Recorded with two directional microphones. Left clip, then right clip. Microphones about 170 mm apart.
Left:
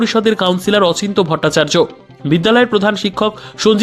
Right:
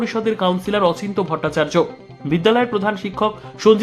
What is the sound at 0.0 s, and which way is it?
Speech, 35° left (ahead or behind).